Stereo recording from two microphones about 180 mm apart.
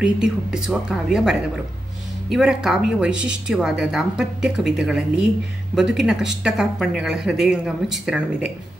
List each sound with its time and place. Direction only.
0.0 s speech: 5° right (ahead or behind)